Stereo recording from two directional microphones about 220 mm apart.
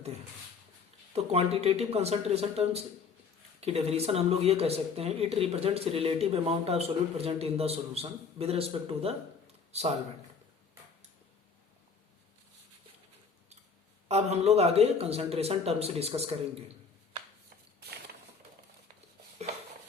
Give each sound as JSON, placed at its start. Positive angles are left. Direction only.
{"t": 1.1, "sound": "speech", "side_deg": -30}
{"t": 14.1, "sound": "speech", "side_deg": -30}
{"t": 17.7, "sound": "a sound", "side_deg": -45}